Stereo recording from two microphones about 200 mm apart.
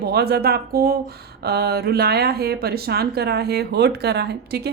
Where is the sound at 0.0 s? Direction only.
55° right (ahead or behind).